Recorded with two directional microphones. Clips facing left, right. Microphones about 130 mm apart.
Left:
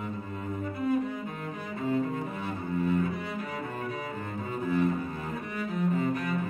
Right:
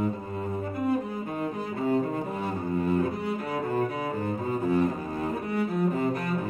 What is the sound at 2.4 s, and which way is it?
Cello, 35° right (ahead or behind).